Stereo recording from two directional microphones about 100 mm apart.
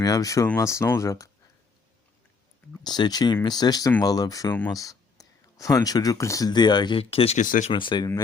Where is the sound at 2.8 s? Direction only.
45° left (ahead or behind).